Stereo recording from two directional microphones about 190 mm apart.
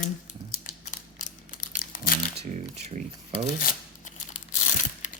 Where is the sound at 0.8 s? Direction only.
40° left (ahead or behind).